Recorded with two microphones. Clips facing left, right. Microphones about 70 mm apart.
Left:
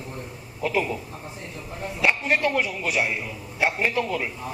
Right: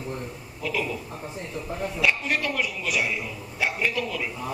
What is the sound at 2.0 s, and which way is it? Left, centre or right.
A man's voice, left.